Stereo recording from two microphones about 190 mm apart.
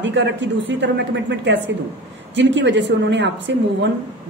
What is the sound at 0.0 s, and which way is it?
A woman's voice, 70° right (ahead or behind).